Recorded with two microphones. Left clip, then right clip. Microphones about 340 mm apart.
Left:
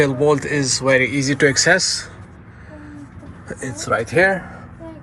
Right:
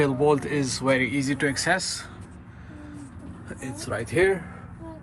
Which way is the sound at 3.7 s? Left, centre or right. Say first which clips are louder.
Left 9 dB; left.